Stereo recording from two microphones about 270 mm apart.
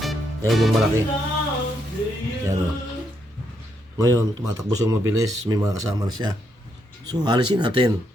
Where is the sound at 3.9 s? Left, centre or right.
Centre.